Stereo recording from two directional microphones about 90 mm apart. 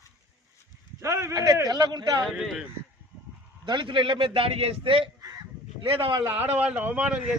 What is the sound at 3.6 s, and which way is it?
A man's voice, 60° right (ahead or behind).